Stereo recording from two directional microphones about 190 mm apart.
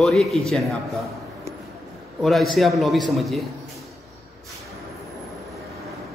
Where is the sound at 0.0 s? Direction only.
Centre (ahead or behind).